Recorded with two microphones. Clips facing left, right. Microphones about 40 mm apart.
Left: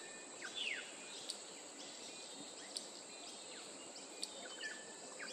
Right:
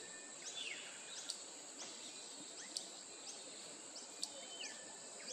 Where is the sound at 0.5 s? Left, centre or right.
Left.